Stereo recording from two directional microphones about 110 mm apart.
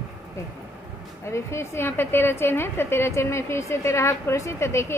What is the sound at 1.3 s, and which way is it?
A woman's voice, 25° left (ahead or behind).